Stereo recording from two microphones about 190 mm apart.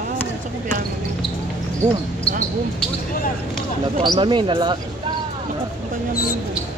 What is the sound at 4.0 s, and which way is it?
Speech, 25° right (ahead or behind).